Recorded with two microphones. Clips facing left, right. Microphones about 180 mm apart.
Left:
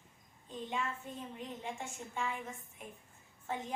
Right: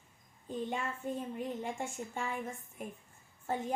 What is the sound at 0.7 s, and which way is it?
A woman's voice, 50° right (ahead or behind).